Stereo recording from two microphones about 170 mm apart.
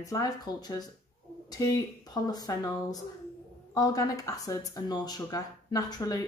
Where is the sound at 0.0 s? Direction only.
20° left (ahead or behind).